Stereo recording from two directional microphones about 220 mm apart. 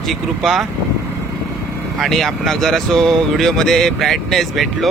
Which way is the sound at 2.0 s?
Centre (ahead or behind).